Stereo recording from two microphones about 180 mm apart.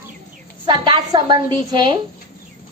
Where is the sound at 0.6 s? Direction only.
25° right (ahead or behind).